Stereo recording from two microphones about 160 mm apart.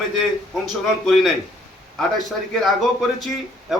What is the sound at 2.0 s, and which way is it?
Speech, centre (ahead or behind).